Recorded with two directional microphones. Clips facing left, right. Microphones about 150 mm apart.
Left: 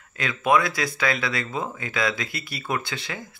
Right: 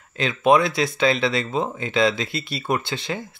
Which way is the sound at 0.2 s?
25° right (ahead or behind).